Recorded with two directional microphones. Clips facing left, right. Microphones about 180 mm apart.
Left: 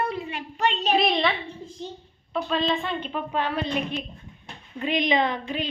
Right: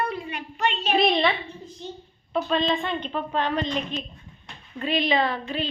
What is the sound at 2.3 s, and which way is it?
Speech, centre (ahead or behind).